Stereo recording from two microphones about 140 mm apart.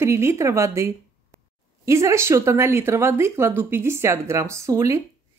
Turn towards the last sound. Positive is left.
turn(degrees=-20)  # may be behind; listen again after turning